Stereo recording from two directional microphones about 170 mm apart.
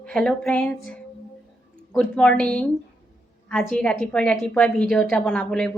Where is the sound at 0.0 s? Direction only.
5° left (ahead or behind).